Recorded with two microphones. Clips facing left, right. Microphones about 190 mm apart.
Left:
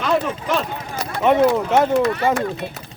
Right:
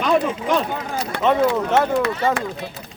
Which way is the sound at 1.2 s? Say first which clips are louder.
Left 3 dB; 15° left (ahead or behind).